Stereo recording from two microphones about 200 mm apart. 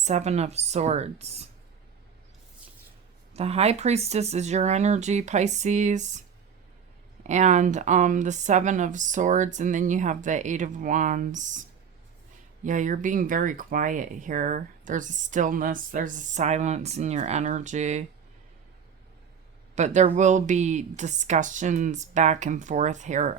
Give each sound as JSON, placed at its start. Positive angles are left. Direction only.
{"t": 0.0, "sound": "speech", "side_deg": -35}
{"t": 3.3, "sound": "speech", "side_deg": -30}
{"t": 7.3, "sound": "speech", "side_deg": -35}
{"t": 12.6, "sound": "speech", "side_deg": -40}
{"t": 19.7, "sound": "speech", "side_deg": -35}